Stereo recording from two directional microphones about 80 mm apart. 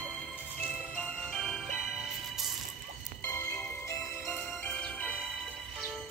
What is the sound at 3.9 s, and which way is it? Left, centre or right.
Music, left.